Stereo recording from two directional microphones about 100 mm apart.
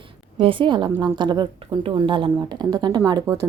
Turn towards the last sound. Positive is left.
turn(degrees=-25)  # may be behind; listen again after turning